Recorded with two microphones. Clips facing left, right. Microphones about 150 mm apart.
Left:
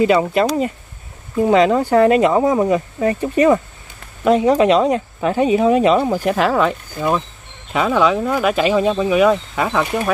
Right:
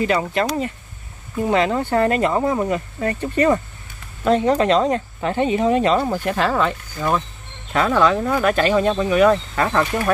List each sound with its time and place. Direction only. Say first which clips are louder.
0.0 s speech: left 5 dB; 20° left (ahead or behind)
1.9 s speech: left 5 dB; 10° left (ahead or behind)